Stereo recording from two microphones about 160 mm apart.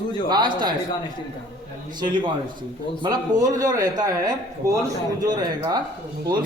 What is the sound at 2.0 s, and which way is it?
A man's voice, 30° right (ahead or behind).